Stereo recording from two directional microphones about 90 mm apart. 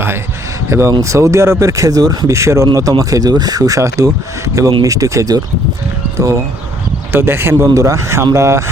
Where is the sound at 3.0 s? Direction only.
45° right (ahead or behind).